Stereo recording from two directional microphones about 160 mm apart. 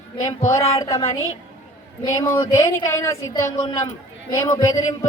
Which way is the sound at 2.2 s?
15° left (ahead or behind).